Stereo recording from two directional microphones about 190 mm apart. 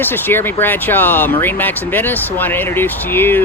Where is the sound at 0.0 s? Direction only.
10° left (ahead or behind).